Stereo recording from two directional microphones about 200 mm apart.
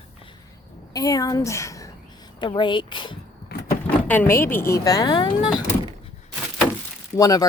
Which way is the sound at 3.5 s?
50° left (ahead or behind).